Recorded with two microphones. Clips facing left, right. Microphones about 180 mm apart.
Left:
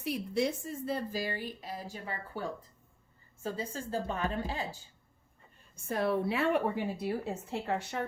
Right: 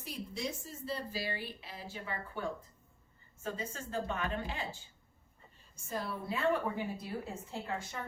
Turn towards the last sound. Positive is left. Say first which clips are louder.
# left 6 dB
turn(degrees=70)  # may be behind; listen again after turning